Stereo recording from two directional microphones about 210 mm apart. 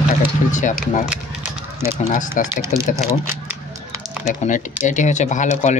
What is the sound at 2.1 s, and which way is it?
Speech, 40° left (ahead or behind).